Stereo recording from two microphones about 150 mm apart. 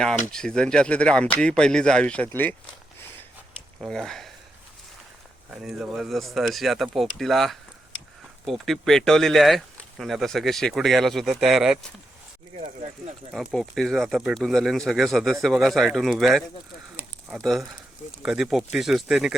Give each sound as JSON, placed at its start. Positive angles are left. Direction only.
{"t": 0.3, "sound": "speech", "side_deg": 5}
{"t": 3.8, "sound": "speech", "side_deg": 5}
{"t": 5.5, "sound": "speech", "side_deg": -5}
{"t": 12.5, "sound": "speech", "side_deg": -45}
{"t": 13.3, "sound": "speech", "side_deg": 0}